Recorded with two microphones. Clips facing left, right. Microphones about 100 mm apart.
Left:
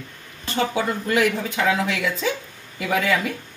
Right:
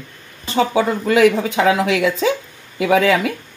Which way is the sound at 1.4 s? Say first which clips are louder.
Right 6 dB; 90° right.